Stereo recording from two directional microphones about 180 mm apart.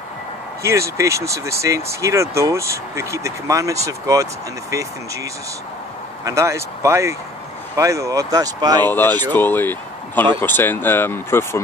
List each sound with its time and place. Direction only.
0.6 s speech: 15° right (ahead or behind)
8.8 s speech: 10° left (ahead or behind)